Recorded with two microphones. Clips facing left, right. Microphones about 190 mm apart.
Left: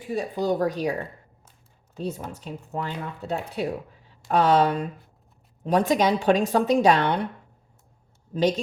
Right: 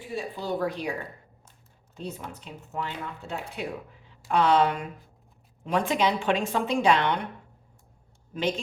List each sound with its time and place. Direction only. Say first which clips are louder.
0.2 s speech: left 5 dB; 45° left (ahead or behind)
2.4 s speech: left 2 dB; 35° left (ahead or behind)
8.3 s speech: left 6 dB; 35° left (ahead or behind)